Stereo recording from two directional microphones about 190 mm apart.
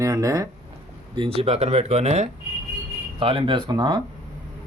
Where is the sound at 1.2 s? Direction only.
30° right (ahead or behind).